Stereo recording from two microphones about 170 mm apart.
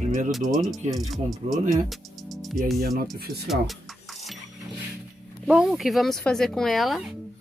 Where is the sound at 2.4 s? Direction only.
Centre (ahead or behind).